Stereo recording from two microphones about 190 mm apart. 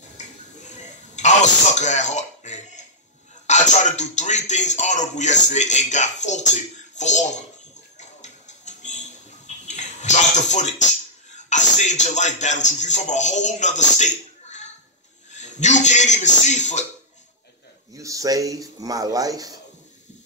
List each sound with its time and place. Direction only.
0.2 s a sound: 40° left (ahead or behind)
3.4 s speech: 40° left (ahead or behind)
8.0 s music: 40° left (ahead or behind)
9.5 s a sound: 40° left (ahead or behind)
11.3 s a man's voice: 40° left (ahead or behind)
17.9 s speech: 15° right (ahead or behind)